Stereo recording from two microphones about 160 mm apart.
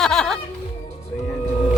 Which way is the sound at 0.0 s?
5° left (ahead or behind).